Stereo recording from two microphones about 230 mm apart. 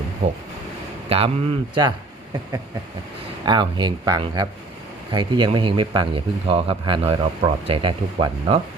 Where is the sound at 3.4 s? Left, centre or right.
Centre.